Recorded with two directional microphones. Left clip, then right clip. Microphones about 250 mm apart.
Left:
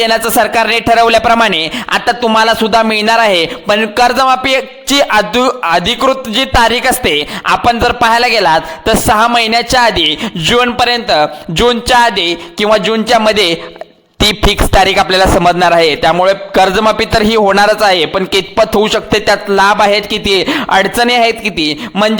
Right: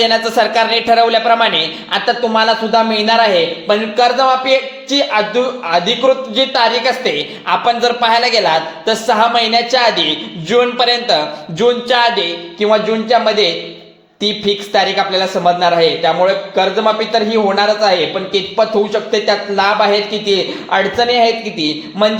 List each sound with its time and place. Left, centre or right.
0.0 s a woman's voice: left